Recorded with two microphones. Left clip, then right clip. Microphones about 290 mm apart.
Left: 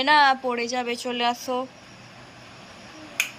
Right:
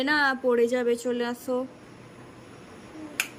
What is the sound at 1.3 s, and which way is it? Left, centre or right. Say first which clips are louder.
Speech: left 4 dB; left.